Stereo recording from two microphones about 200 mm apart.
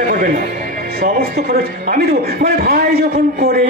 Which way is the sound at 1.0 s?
50° right (ahead or behind).